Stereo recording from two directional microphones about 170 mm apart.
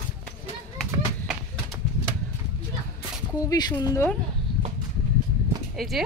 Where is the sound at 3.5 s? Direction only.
25° left (ahead or behind).